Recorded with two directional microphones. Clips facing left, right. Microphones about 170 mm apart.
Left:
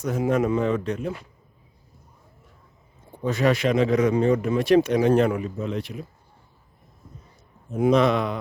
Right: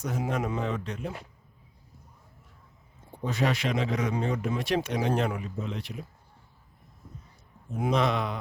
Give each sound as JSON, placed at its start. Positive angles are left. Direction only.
{"t": 0.0, "sound": "speech", "side_deg": 55}
{"t": 3.2, "sound": "speech", "side_deg": 50}
{"t": 7.8, "sound": "speech", "side_deg": 60}